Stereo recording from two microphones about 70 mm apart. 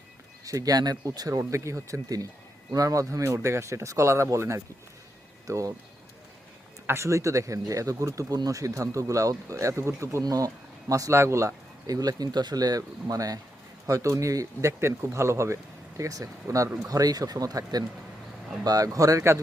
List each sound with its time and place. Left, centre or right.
0.4 s speech: right
1.4 s speech: right
5.5 s speech: right
6.8 s speech: right
13.8 s speech: right
16.0 s speech: right
16.9 s speech: right